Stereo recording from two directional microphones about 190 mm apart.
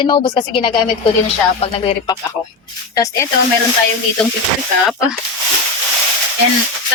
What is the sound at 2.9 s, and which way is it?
Speech, 15° left (ahead or behind).